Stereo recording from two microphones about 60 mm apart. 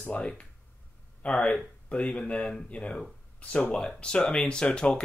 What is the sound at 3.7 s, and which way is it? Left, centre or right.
Speech, centre.